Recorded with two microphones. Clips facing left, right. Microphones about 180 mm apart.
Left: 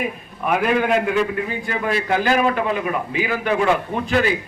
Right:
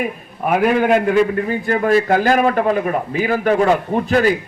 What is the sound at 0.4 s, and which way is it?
A man's voice, 45° right (ahead or behind).